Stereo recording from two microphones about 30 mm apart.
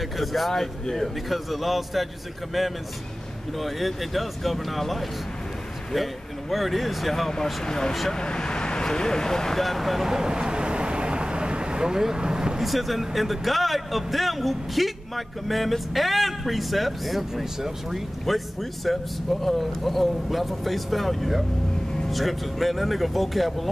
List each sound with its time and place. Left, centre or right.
0.0 s a sound: centre
0.5 s speech: centre
3.5 s speech: centre
7.6 s speech: left
9.6 s speech: centre
10.2 s vehicle: right
12.5 s speech: centre
18.2 s speech: centre